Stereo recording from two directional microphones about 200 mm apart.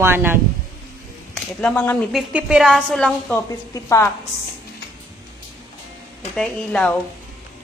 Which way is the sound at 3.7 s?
15° left (ahead or behind).